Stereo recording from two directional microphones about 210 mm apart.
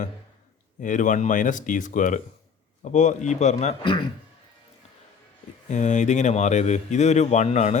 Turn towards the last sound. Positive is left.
turn(degrees=35)  # may be behind; listen again after turning